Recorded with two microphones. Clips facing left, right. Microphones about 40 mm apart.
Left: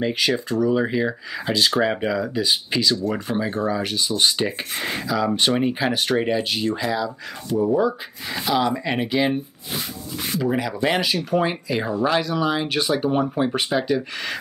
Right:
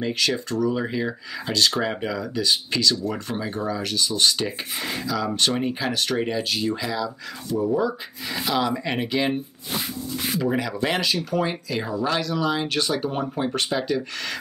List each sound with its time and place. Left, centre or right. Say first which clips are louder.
0.0 s speech: left 3 dB; centre
7.7 s speech: left 3 dB; centre
11.2 s speech: left 3 dB; centre